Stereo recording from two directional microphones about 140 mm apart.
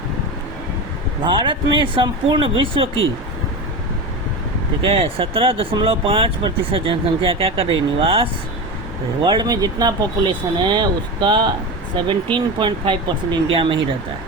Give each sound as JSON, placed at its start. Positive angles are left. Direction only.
{"t": 1.2, "sound": "speech", "side_deg": -35}
{"t": 4.8, "sound": "speech", "side_deg": -45}